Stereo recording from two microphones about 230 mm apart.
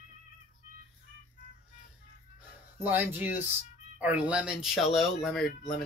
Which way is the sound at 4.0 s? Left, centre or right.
Centre.